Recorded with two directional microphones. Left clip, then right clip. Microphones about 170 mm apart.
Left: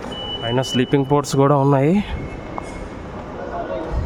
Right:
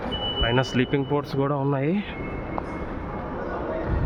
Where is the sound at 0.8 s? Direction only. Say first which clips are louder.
Left 7 dB; 65° left (ahead or behind); by 2.0 s 50° left (ahead or behind).